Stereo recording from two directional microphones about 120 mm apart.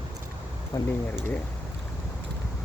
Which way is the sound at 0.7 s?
35° left (ahead or behind).